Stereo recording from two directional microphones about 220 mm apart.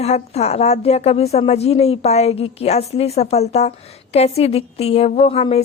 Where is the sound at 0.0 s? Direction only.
30° left (ahead or behind).